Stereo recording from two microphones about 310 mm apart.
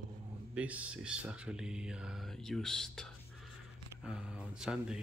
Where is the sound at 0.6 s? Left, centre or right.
Centre.